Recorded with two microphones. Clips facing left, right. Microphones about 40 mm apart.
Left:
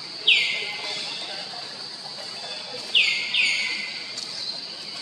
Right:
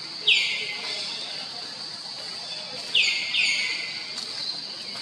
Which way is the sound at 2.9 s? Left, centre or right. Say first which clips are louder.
Left 2 dB; centre.